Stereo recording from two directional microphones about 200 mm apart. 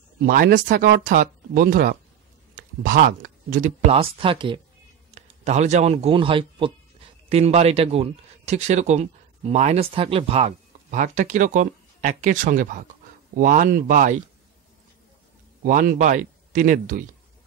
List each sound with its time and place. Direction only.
0.3 s a man's voice: 45° right (ahead or behind)
15.6 s speech: 45° right (ahead or behind)